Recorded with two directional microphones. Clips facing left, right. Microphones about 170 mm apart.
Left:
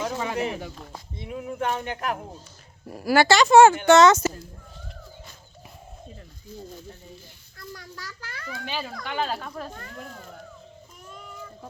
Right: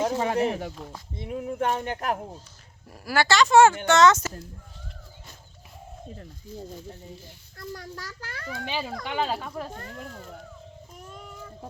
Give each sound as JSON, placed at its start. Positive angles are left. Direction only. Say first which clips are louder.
{"t": 0.0, "sound": "a sound", "louder": "right 4 dB", "side_deg": -40}
{"t": 0.3, "sound": "a child's voice", "louder": "right 3 dB", "side_deg": -45}
{"t": 2.9, "sound": "speech", "louder": "left 5 dB", "side_deg": 10}
{"t": 7.8, "sound": "a child's voice", "louder": "right 2 dB", "side_deg": -50}
{"t": 8.6, "sound": "speech", "louder": "right 1 dB", "side_deg": -20}
{"t": 9.7, "sound": "speech", "louder": "right 1 dB", "side_deg": -30}